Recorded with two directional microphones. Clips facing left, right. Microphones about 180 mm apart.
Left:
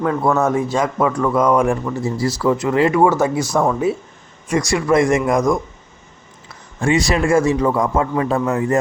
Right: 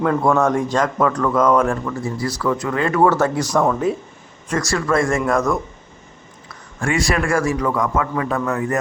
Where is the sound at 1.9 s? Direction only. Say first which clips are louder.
Left 3 dB; 25° left (ahead or behind).